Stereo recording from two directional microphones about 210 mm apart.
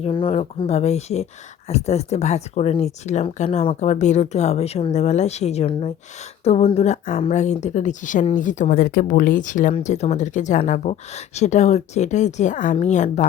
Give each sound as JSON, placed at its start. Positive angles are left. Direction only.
{"t": 0.0, "sound": "speech", "side_deg": 25}